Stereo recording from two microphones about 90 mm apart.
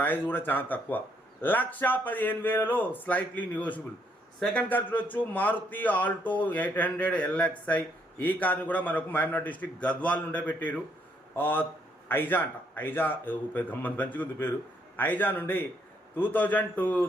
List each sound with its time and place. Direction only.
0.0 s speech: 20° left (ahead or behind)